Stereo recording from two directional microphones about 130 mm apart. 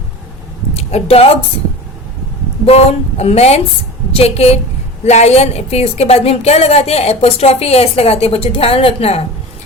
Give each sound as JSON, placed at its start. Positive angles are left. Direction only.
{"t": 0.7, "sound": "a sound", "side_deg": 55}
{"t": 2.6, "sound": "music", "side_deg": 55}
{"t": 4.1, "sound": "a woman's voice", "side_deg": 50}